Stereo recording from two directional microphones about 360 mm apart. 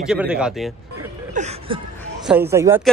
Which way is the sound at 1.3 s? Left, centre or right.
Centre.